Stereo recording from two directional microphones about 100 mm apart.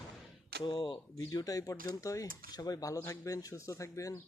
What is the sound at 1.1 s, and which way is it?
Speech, 35° left (ahead or behind).